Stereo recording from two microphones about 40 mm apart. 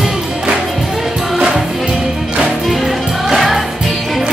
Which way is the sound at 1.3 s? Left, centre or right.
Centre.